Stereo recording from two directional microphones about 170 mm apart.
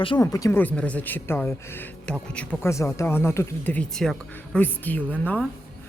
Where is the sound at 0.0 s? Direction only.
25° left (ahead or behind).